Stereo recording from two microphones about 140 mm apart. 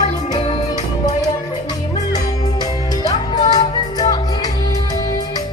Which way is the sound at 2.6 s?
30° left (ahead or behind).